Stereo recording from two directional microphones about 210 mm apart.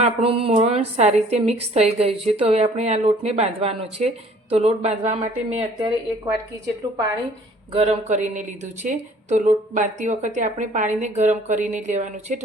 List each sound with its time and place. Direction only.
0.0 s a woman's voice: 25° right (ahead or behind)
7.7 s a woman's voice: 30° right (ahead or behind)